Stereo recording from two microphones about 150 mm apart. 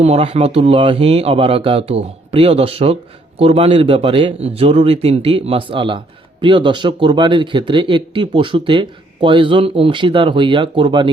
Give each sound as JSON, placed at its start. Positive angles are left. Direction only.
{"t": 0.0, "sound": "speech", "side_deg": -45}